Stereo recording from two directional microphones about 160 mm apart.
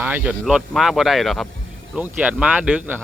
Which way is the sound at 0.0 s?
10° right (ahead or behind).